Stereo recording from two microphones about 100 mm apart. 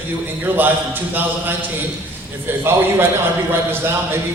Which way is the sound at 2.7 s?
25° right (ahead or behind).